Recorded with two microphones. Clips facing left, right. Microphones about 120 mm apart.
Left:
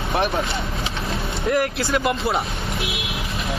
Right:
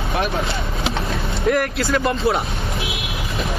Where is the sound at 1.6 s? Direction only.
25° left (ahead or behind).